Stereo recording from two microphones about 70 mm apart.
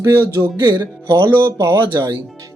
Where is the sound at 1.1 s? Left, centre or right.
Right.